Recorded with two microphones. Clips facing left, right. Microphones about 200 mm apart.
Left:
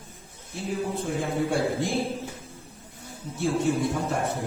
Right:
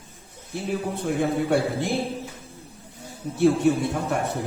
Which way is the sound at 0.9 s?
65° right (ahead or behind).